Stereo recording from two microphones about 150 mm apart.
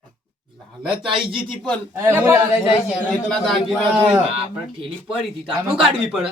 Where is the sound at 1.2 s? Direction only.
Centre (ahead or behind).